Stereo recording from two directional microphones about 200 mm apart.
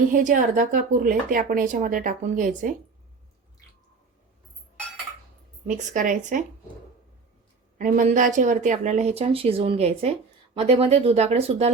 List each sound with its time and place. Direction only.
0.1 s a woman's voice: 40° right (ahead or behind)
5.6 s a woman's voice: 40° right (ahead or behind)
7.8 s a woman's voice: 40° right (ahead or behind)